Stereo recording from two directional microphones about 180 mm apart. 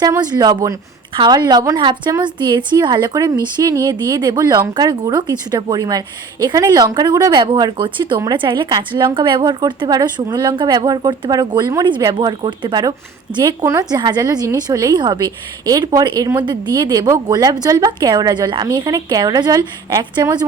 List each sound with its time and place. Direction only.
0.0 s a woman's voice: 20° right (ahead or behind)